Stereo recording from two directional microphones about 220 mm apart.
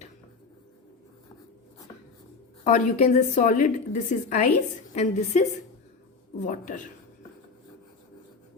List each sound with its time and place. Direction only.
2.6 s a woman's voice: 30° left (ahead or behind)